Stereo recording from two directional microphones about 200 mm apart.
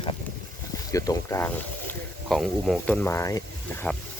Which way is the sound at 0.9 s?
15° left (ahead or behind).